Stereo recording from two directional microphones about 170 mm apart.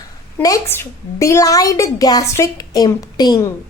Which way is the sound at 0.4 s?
15° left (ahead or behind).